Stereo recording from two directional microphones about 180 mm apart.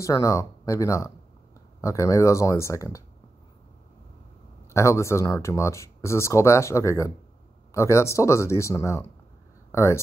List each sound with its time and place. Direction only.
0.0 s speech: 20° left (ahead or behind)
4.7 s speech: 15° left (ahead or behind)